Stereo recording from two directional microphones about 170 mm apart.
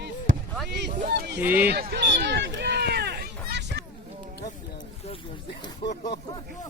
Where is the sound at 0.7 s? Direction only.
85° right.